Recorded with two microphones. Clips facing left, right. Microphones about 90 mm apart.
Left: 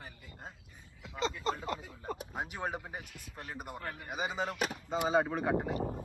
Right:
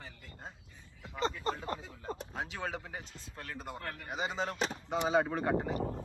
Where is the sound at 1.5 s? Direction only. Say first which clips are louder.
Left 1 dB; 25° right (ahead or behind).